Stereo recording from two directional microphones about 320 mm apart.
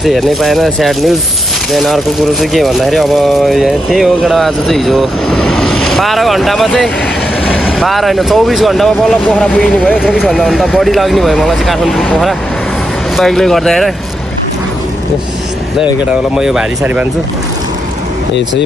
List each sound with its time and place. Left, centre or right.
0.0 s speech: centre
16.3 s speech: centre